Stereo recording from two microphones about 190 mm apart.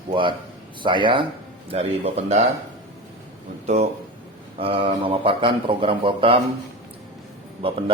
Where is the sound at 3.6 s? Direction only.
35° right (ahead or behind).